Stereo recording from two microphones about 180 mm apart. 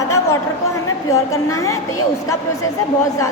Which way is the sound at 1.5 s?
15° left (ahead or behind).